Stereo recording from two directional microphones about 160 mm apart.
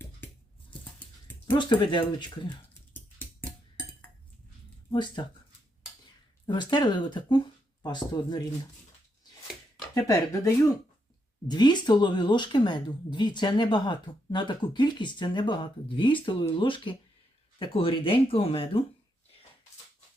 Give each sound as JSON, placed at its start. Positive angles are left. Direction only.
{"t": 0.7, "sound": "a sound", "side_deg": 10}
{"t": 1.5, "sound": "speech", "side_deg": 30}
{"t": 4.9, "sound": "speech", "side_deg": 30}
{"t": 6.4, "sound": "speech", "side_deg": 30}
{"t": 9.9, "sound": "speech", "side_deg": 20}